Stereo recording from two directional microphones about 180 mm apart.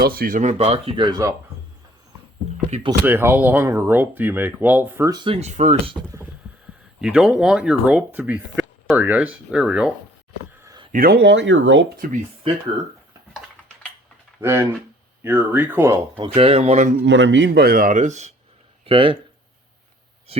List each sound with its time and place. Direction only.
0.0 s speech: 55° right (ahead or behind); by 1.3 s 25° right (ahead or behind)
2.6 s speech: 35° right (ahead or behind)
3.1 s speech: 10° right (ahead or behind); by 5.9 s 40° right (ahead or behind)
7.0 s speech: 5° right (ahead or behind)
10.6 s a sound: 20° right (ahead or behind)
10.9 s speech: 55° right (ahead or behind); by 11.9 s 90° right
11.9 s speech: 50° right (ahead or behind)
14.4 s speech: 15° right (ahead or behind)
16.1 s speech: 30° right (ahead or behind)
17.0 s speech: 90° right; by 18.3 s 40° right (ahead or behind)
18.9 s speech: 30° right (ahead or behind)